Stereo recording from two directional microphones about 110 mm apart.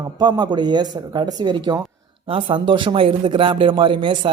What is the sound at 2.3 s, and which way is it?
Speech, 50° right (ahead or behind).